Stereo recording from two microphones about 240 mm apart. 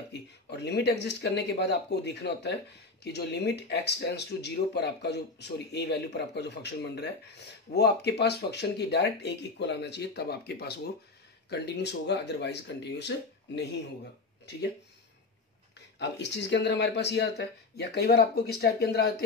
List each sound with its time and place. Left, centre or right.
0.5 s speech: left
16.0 s speech: left